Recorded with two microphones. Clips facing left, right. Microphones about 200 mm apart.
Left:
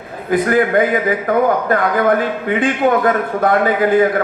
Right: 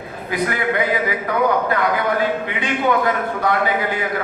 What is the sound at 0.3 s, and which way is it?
A man's voice, 50° left (ahead or behind).